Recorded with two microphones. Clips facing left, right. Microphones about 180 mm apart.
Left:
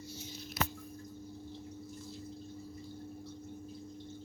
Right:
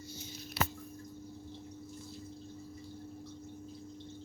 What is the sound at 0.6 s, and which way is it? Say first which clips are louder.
Squish: right 1 dB; 30° right (ahead or behind).